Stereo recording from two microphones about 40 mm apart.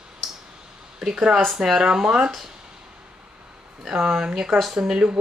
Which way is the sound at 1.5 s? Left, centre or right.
Centre.